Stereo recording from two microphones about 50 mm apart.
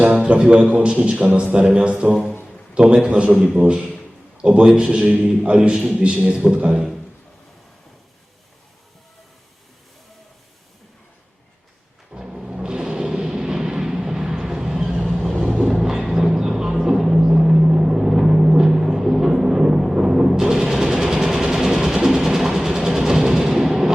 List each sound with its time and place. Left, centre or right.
0.2 s a man's voice: centre
6.0 s a man's voice: right
12.1 s music: centre
13.3 s vehicle: centre
15.4 s music: centre